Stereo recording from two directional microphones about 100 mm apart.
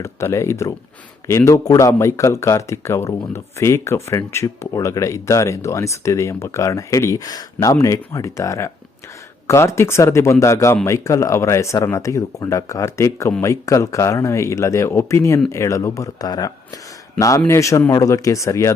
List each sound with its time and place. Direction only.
0.0 s speech: 30° left (ahead or behind)